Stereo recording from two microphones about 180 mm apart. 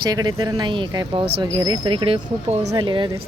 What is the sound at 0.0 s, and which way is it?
Speech, 25° right (ahead or behind).